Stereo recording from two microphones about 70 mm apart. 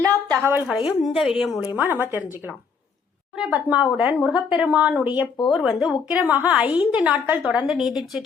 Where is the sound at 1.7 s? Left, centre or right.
Right.